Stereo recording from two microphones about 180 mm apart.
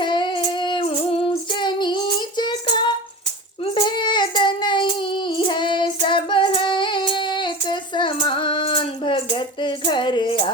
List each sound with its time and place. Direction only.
0.0 s child singing: 25° left (ahead or behind)